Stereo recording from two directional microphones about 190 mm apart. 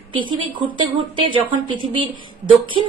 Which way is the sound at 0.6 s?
25° right (ahead or behind).